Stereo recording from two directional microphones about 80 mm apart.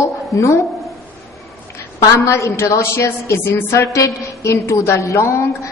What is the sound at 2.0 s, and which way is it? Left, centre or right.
A woman's voice, left.